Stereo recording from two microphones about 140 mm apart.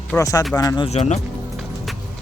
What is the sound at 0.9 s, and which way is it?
Speech, 55° left (ahead or behind).